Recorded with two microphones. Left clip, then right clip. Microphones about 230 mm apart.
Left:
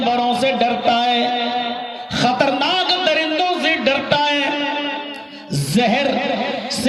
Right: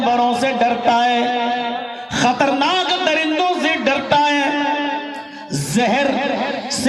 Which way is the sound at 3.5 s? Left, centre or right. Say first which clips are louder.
Even; left.